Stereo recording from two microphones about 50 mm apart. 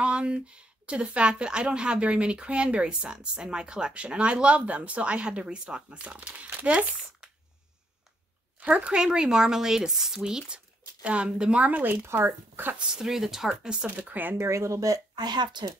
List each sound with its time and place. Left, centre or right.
0.0 s a woman's voice: right
8.5 s speech: right
9.0 s speech: centre
10.8 s a woman's voice: right
11.6 s speech: right
12.0 s speech: right
12.3 s speech: right
12.9 s speech: centre
13.8 s speech: right
14.4 s speech: right